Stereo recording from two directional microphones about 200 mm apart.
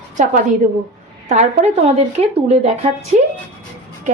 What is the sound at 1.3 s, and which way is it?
Speech, 35° right (ahead or behind).